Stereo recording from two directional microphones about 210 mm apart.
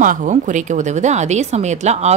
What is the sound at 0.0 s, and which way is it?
A woman's voice, 40° right (ahead or behind).